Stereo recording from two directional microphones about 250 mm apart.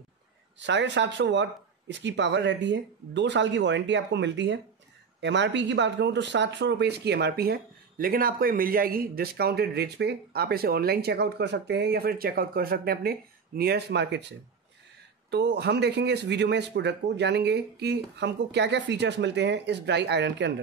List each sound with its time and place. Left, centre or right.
0.6 s speech: right
15.3 s speech: right